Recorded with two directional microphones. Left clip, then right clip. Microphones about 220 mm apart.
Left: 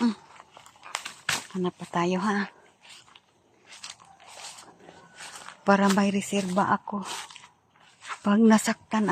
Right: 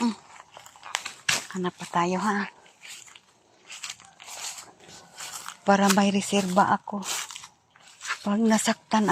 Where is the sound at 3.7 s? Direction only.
50° right (ahead or behind).